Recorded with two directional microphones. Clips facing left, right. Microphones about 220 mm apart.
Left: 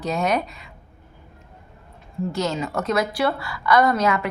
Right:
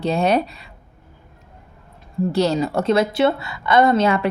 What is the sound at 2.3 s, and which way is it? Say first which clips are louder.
A woman's voice: right 6 dB; 35° right (ahead or behind).